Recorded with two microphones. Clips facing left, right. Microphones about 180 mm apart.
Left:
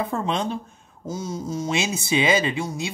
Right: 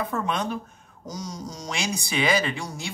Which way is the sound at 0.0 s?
25° left (ahead or behind).